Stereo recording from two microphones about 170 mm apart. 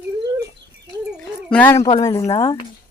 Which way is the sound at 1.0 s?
5° left (ahead or behind).